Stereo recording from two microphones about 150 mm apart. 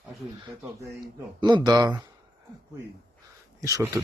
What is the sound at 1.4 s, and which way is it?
Speech, 25° right (ahead or behind).